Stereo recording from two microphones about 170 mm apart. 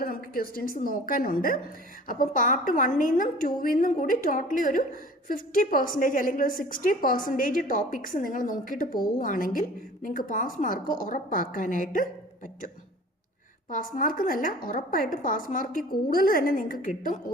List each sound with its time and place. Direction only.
0.0 s a woman's voice: 60° left (ahead or behind)
13.7 s a woman's voice: 55° left (ahead or behind)